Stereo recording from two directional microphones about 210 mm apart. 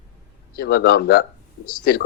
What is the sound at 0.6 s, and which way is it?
A man's voice, 50° left (ahead or behind).